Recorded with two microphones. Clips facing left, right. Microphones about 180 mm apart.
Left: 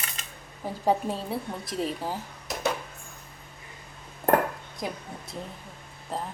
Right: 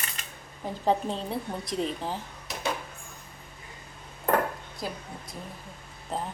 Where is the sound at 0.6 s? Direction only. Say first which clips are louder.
Left 1 dB; 5° left (ahead or behind).